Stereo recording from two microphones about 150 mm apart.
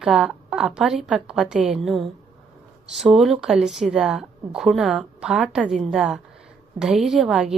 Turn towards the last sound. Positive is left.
turn(degrees=-5)  # may be behind; listen again after turning